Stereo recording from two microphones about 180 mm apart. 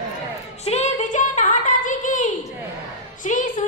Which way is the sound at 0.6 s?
35° left (ahead or behind).